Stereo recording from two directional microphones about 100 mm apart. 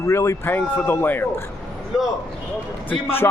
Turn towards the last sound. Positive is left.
turn(degrees=20)  # may be behind; listen again after turning